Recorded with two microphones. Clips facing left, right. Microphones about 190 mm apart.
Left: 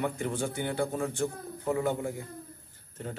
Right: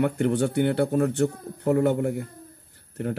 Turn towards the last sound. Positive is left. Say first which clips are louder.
# right 10 dB
turn(degrees=-65)  # may be behind; listen again after turning